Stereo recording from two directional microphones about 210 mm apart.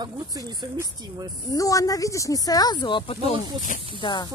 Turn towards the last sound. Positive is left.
turn(degrees=20)  # may be behind; listen again after turning